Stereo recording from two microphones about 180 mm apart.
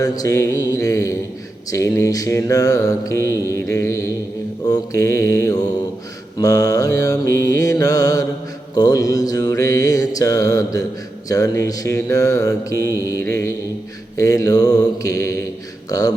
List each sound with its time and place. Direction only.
0.0 s mantra: 15° left (ahead or behind)